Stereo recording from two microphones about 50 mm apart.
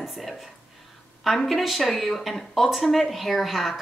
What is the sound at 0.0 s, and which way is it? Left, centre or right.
Speech, centre.